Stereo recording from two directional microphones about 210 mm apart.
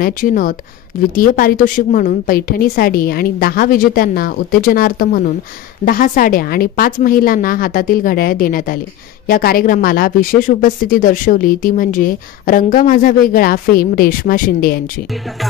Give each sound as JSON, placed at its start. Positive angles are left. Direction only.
{"t": 0.0, "sound": "a woman's voice", "side_deg": 40}